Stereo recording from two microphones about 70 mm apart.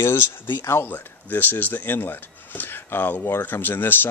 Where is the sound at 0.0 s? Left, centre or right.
Left.